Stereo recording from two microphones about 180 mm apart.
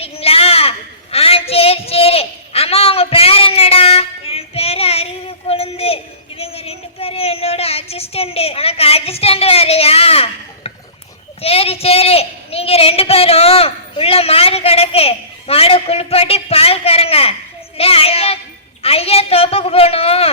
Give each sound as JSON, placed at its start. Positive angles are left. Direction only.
{"t": 0.0, "sound": "a sound", "side_deg": 35}
{"t": 17.7, "sound": "child singing", "side_deg": 35}
{"t": 18.8, "sound": "a man's voice", "side_deg": 35}